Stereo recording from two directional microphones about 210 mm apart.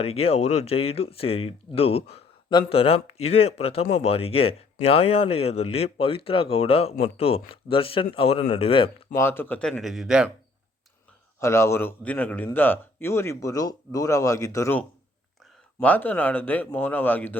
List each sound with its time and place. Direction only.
0.0 s speech: 30° left (ahead or behind)
9.1 s speech: 10° left (ahead or behind)
11.3 s speech: 15° left (ahead or behind)